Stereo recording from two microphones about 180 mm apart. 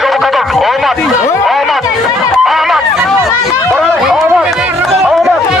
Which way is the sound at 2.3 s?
Centre (ahead or behind).